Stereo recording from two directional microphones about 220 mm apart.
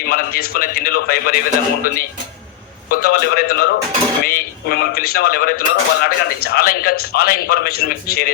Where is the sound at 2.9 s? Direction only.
45° left (ahead or behind).